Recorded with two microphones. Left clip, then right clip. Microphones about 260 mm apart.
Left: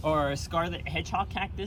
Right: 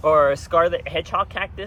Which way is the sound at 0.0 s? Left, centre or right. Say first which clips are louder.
Right 11 dB; centre.